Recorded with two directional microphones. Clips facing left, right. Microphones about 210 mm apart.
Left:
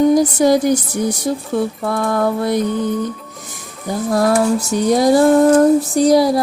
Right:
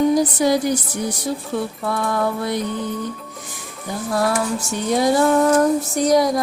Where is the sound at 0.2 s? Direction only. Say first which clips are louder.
Left 4 dB; 45° left (ahead or behind).